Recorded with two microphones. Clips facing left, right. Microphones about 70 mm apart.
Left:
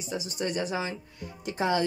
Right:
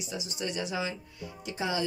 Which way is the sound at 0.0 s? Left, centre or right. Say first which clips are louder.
Left 4 dB; left.